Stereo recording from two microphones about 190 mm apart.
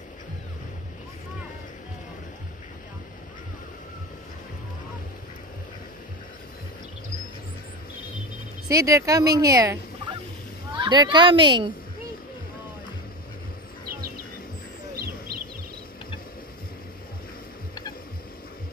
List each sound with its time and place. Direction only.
8.6 s a woman's voice: 20° right (ahead or behind)